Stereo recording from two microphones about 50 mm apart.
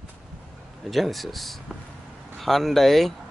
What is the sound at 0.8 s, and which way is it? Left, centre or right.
Speech, centre.